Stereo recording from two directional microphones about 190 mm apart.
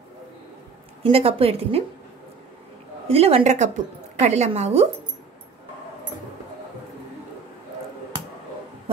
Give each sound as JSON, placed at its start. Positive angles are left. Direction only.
{"t": 1.0, "sound": "a woman's voice", "side_deg": -30}
{"t": 3.1, "sound": "a woman's voice", "side_deg": -35}